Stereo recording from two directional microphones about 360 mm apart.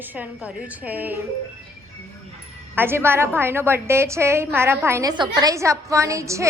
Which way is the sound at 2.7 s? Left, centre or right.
Centre.